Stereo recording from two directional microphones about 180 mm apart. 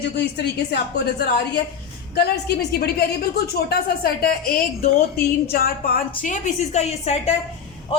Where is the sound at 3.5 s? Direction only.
60° left (ahead or behind); by 7.3 s 35° left (ahead or behind).